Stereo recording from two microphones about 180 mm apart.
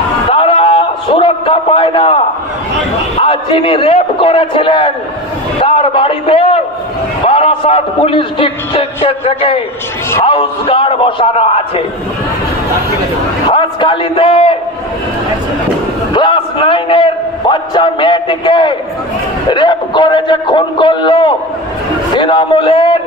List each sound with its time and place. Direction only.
0.3 s a sound: 30° left (ahead or behind)
3.2 s a man's voice: 30° left (ahead or behind)
13.5 s a man's voice: 25° left (ahead or behind)
16.1 s a man's voice: 25° left (ahead or behind)